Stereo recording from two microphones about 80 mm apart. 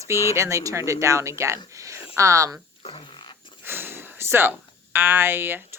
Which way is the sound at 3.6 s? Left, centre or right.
Right.